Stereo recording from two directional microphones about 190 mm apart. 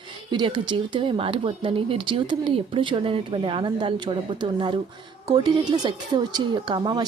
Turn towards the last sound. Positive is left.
turn(degrees=-20)  # may be behind; listen again after turning